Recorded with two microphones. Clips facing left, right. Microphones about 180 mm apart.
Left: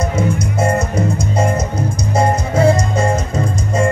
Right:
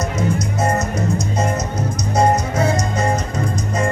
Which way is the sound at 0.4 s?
30° left (ahead or behind).